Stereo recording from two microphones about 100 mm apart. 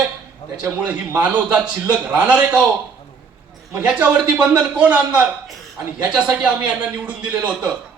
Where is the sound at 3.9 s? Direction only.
15° right (ahead or behind).